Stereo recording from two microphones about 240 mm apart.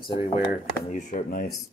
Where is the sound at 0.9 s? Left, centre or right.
Left.